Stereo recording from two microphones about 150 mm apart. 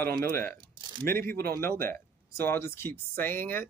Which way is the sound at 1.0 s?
75° right (ahead or behind).